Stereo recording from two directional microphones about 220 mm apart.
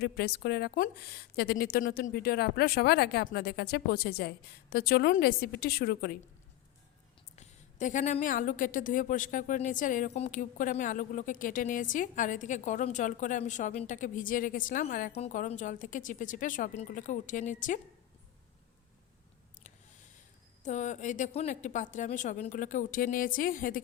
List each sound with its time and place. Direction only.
0.0 s a woman's voice: 45° left (ahead or behind)
7.3 s a woman's voice: 35° left (ahead or behind)
20.7 s a woman's voice: 35° left (ahead or behind)